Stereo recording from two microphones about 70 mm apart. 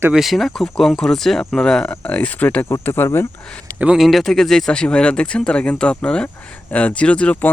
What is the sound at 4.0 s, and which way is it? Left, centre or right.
Speech, centre.